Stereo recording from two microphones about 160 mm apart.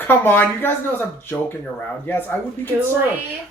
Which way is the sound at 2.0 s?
10° left (ahead or behind).